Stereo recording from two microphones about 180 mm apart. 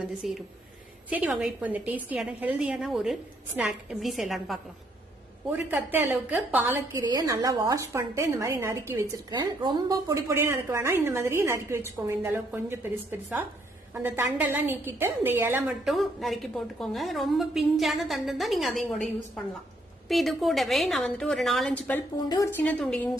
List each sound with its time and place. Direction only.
0.2 s a woman's voice: centre (ahead or behind)
7.0 s a woman's voice: 20° right (ahead or behind)
15.8 s a woman's voice: centre (ahead or behind)
22.3 s speech: 20° left (ahead or behind)
22.6 s a woman's voice: 5° left (ahead or behind)